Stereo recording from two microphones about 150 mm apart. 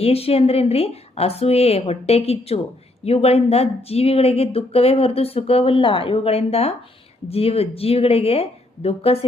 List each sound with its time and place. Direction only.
0.0 s a woman's voice: 40° left (ahead or behind)